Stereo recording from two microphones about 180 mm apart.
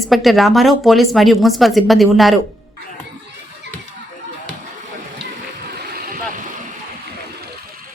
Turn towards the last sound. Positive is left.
turn(degrees=-55)  # may be behind; listen again after turning